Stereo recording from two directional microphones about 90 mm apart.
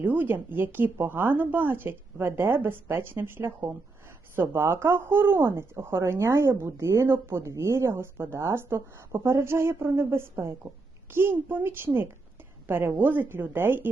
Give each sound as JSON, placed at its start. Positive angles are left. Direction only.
{"t": 0.0, "sound": "speech", "side_deg": -20}